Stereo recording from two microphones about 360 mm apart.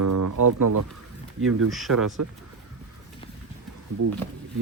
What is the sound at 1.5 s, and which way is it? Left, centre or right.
Speech, right.